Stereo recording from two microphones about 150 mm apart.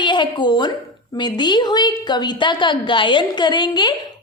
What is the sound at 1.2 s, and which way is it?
A woman's voice, 30° left (ahead or behind).